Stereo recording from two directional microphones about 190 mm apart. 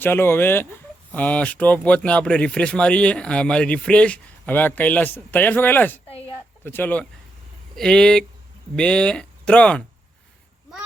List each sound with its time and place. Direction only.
0.0 s speech: 10° left (ahead or behind)
6.1 s a sound: 30° left (ahead or behind)
6.7 s speech: 10° left (ahead or behind)